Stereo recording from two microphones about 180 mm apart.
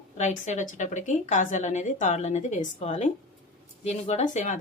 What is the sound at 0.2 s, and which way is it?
A woman's voice, 40° left (ahead or behind).